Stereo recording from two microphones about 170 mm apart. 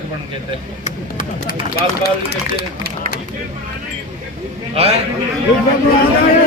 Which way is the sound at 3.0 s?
60° right (ahead or behind).